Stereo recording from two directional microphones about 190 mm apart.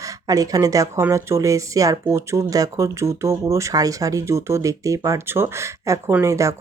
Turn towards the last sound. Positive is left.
turn(degrees=-15)  # may be behind; listen again after turning